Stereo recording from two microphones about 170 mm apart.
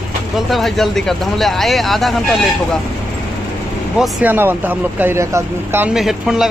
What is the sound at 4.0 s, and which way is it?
Speech, 10° right (ahead or behind).